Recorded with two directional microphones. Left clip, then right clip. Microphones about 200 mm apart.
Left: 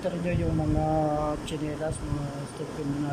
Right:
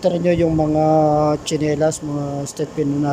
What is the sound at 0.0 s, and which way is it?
Speech, 25° right (ahead or behind).